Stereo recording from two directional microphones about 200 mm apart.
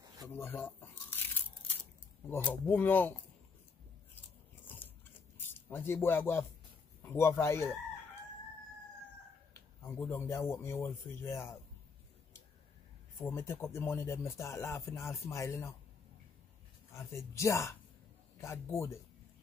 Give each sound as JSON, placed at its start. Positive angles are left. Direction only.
{"t": 0.0, "sound": "a sound", "side_deg": -20}
{"t": 0.4, "sound": "speech", "side_deg": 10}
{"t": 2.2, "sound": "speech", "side_deg": 10}
{"t": 4.6, "sound": "biting", "side_deg": 10}
{"t": 5.4, "sound": "a man's voice", "side_deg": 10}
{"t": 9.5, "sound": "speech", "side_deg": 10}
{"t": 13.2, "sound": "speech", "side_deg": 15}
{"t": 16.9, "sound": "speech", "side_deg": 15}